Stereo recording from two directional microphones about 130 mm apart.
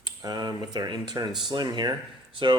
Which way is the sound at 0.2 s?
30° right (ahead or behind).